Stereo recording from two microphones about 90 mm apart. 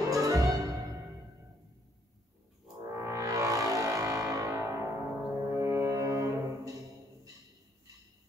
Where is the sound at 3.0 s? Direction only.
35° right (ahead or behind).